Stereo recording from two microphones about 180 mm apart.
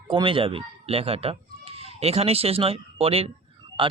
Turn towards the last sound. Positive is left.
turn(degrees=-30)  # may be behind; listen again after turning